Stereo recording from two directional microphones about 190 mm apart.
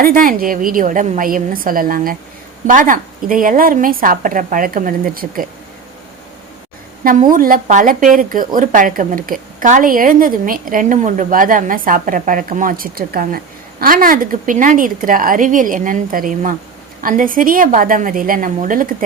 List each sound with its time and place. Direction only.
0.0 s speech: 50° right (ahead or behind)
7.0 s speech: 45° right (ahead or behind)